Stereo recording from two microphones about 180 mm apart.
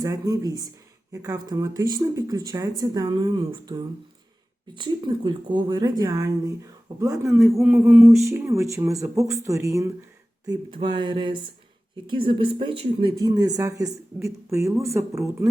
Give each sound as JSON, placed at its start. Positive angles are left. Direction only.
{"t": 0.0, "sound": "speech", "side_deg": -20}